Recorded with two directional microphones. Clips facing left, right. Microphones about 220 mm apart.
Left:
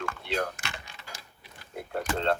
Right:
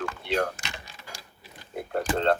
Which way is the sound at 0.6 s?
15° right (ahead or behind).